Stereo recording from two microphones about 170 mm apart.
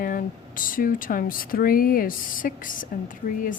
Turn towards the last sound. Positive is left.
turn(degrees=50)  # may be behind; listen again after turning